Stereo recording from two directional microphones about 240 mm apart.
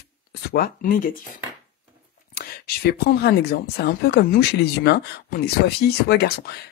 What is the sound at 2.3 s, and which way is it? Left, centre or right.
Speech, left.